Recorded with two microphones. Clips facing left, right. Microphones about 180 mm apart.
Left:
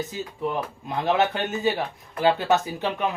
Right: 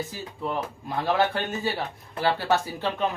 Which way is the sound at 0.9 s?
20° left (ahead or behind).